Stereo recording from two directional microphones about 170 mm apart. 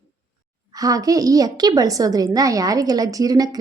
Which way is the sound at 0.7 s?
20° right (ahead or behind).